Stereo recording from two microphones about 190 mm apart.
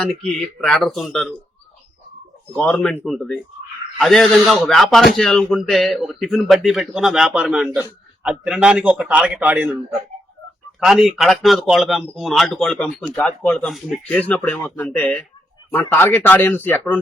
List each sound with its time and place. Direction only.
0.3 s speech: centre (ahead or behind)
2.6 s a man's voice: 5° left (ahead or behind); by 9.7 s 10° right (ahead or behind)
10.8 s a man's voice: centre (ahead or behind)